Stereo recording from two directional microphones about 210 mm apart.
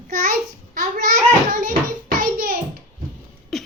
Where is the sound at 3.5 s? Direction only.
Centre (ahead or behind).